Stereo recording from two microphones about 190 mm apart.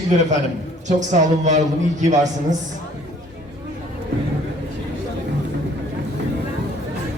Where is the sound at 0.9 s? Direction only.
40° right (ahead or behind).